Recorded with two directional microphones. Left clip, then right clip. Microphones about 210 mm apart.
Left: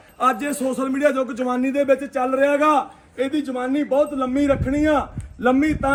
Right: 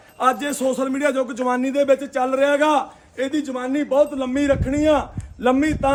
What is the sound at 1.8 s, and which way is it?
A man's voice, 10° left (ahead or behind).